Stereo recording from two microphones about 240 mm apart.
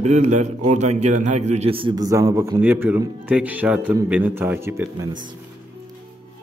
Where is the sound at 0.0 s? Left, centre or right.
Right; by 5.1 s centre.